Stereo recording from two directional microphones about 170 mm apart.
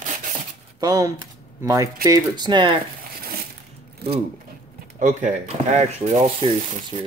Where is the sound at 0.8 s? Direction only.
20° right (ahead or behind).